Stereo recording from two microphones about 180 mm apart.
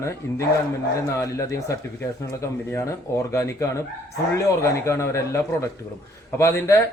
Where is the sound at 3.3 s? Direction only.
15° left (ahead or behind).